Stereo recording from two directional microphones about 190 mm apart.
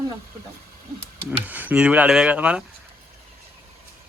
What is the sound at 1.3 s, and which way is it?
Speech, 10° right (ahead or behind).